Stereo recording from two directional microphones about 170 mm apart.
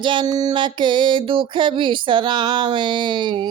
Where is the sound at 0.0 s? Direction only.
25° right (ahead or behind).